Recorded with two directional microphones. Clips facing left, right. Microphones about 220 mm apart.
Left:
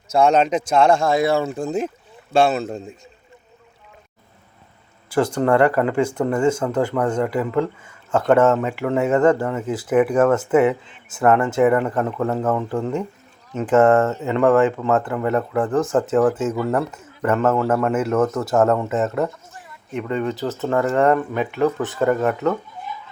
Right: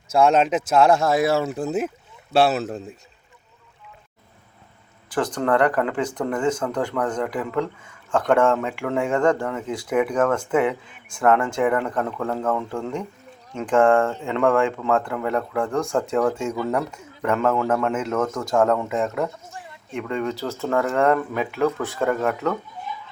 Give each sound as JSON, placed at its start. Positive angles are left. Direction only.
{"t": 0.2, "sound": "speech", "side_deg": 0}
{"t": 5.1, "sound": "speech", "side_deg": 10}